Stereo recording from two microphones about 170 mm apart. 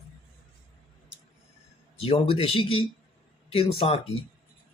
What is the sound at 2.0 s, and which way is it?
Speech, 35° left (ahead or behind).